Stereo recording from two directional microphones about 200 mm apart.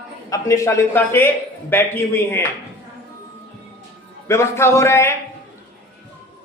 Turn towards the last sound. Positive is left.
turn(degrees=10)  # may be behind; listen again after turning